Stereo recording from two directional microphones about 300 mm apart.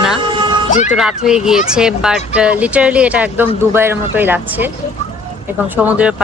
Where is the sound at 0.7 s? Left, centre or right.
Left.